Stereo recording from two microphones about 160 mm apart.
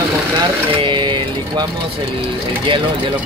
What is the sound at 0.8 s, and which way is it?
Vehicle, 30° right (ahead or behind).